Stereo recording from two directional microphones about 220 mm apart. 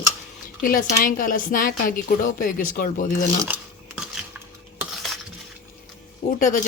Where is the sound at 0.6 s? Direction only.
40° left (ahead or behind).